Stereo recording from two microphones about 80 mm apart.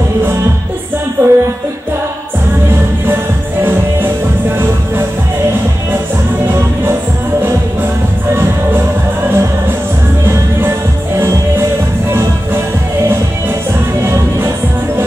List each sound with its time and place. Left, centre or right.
1.2 s music: right
12.1 s music: right
14.0 s music: right